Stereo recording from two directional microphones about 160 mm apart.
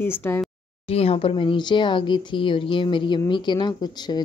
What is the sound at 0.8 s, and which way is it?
Speech, 40° left (ahead or behind).